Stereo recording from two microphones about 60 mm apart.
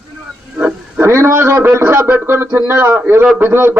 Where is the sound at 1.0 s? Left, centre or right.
Right.